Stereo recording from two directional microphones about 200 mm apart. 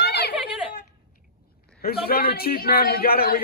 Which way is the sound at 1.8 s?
50° left (ahead or behind).